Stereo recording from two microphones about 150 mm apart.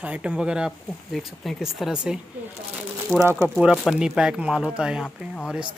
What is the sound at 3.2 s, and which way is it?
Speech, 20° right (ahead or behind).